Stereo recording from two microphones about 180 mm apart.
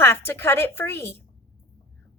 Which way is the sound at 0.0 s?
15° left (ahead or behind).